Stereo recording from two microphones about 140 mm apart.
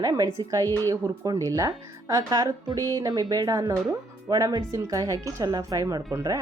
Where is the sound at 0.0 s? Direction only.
25° right (ahead or behind).